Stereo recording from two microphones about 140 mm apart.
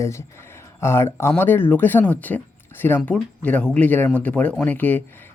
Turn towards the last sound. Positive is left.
turn(degrees=15)  # may be behind; listen again after turning